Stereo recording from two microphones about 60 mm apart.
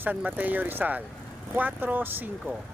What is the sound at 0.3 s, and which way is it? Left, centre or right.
Speech, right.